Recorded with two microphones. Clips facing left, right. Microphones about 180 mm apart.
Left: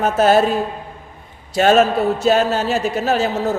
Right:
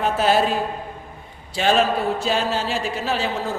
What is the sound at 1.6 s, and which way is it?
A man's voice, 45° left (ahead or behind).